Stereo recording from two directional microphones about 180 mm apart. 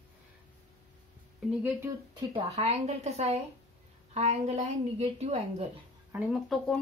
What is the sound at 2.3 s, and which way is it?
A woman's voice, 35° right (ahead or behind).